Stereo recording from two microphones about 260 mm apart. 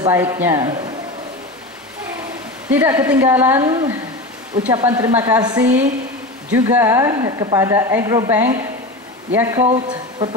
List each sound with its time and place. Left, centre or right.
0.0 s speech: centre
2.7 s speech: centre